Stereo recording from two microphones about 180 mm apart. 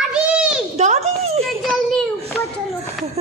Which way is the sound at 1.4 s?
Centre (ahead or behind).